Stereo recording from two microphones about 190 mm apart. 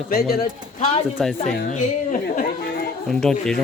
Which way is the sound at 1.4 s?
45° left (ahead or behind).